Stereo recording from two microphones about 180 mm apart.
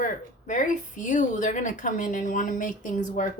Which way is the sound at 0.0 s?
45° left (ahead or behind).